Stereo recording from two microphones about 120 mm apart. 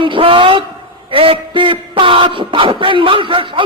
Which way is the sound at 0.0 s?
45° right (ahead or behind).